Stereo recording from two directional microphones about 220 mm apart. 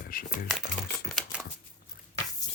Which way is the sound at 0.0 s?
40° left (ahead or behind).